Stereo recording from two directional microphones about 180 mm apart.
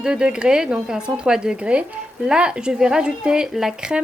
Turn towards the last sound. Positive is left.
turn(degrees=-5)  # may be behind; listen again after turning